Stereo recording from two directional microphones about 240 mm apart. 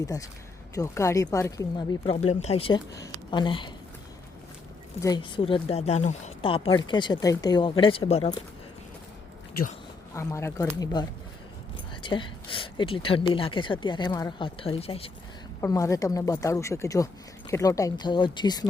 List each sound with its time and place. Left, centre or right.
0.0 s speech: centre
2.2 s speech: left
4.9 s speech: centre
10.2 s speech: centre
12.0 s speech: left
15.6 s speech: centre